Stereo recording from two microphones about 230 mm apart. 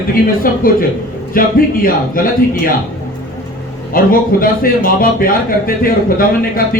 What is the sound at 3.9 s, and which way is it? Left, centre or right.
A man's voice, left.